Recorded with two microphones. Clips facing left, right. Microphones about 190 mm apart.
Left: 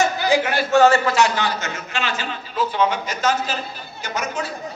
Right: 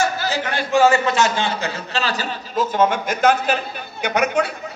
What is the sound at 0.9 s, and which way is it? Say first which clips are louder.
A man's voice: even; 20° right (ahead or behind).